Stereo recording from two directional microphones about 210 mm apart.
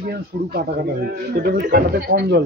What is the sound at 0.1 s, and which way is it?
Speech, 50° right (ahead or behind).